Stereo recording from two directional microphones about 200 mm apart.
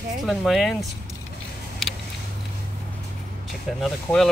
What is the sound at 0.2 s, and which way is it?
Speech, centre (ahead or behind).